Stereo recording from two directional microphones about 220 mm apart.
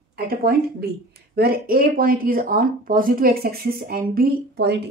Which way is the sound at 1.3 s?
45° right (ahead or behind).